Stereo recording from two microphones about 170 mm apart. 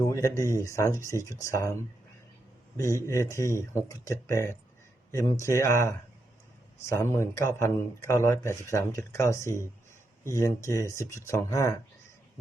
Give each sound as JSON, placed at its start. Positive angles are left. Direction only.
{"t": 0.0, "sound": "speech", "side_deg": 20}
{"t": 3.1, "sound": "speech", "side_deg": 15}
{"t": 7.0, "sound": "speech", "side_deg": 15}